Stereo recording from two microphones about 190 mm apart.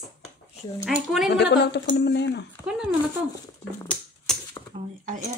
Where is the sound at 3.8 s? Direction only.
10° left (ahead or behind).